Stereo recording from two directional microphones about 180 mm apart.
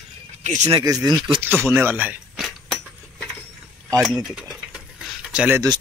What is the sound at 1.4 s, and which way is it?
Dishes, 10° right (ahead or behind).